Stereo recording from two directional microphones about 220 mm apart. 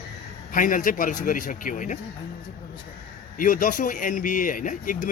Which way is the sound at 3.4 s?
40° left (ahead or behind).